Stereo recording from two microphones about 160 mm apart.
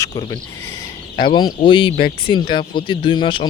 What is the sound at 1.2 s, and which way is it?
Speech, 30° left (ahead or behind).